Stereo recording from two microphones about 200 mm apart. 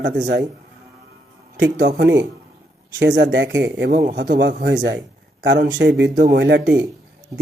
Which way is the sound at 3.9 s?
45° right (ahead or behind).